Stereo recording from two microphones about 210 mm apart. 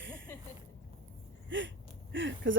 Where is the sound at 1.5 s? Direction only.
60° right (ahead or behind).